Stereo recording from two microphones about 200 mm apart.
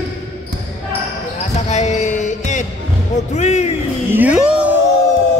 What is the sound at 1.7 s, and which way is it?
Music, 35° left (ahead or behind).